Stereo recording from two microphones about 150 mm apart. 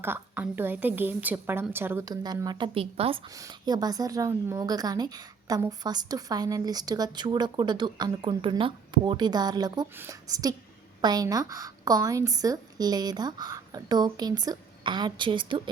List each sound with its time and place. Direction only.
0.0 s a woman's voice: 15° right (ahead or behind)
2.7 s a woman's voice: 40° right (ahead or behind)
3.3 s a woman's voice: 25° right (ahead or behind)